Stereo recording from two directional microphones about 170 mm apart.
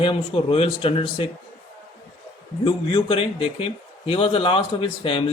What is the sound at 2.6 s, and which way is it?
A man's voice, 30° left (ahead or behind).